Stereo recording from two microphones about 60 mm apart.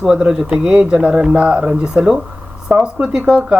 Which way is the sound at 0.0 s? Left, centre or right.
Centre.